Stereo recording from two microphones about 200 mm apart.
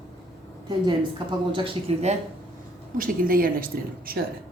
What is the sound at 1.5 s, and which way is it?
Speech, 30° right (ahead or behind).